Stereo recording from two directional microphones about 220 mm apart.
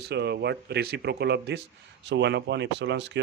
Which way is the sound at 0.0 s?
50° right (ahead or behind).